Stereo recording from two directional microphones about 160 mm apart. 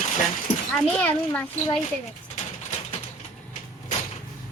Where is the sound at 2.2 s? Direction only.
45° left (ahead or behind).